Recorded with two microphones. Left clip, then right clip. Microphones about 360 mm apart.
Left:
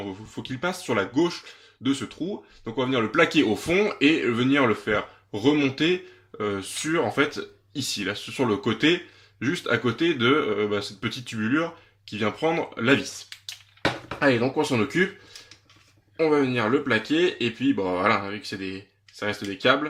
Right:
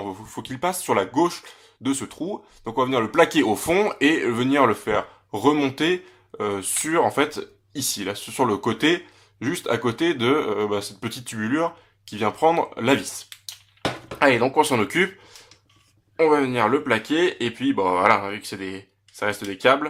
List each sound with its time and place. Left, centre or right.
0.4 s speech: centre
16.1 s speech: centre